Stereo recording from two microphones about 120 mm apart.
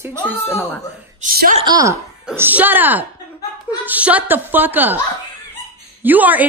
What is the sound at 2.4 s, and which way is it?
A woman's voice, 15° right (ahead or behind).